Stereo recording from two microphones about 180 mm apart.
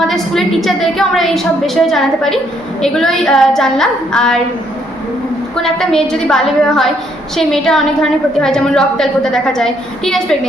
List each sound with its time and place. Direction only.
0.1 s a woman's voice: centre (ahead or behind)
5.6 s a woman's voice: 5° left (ahead or behind)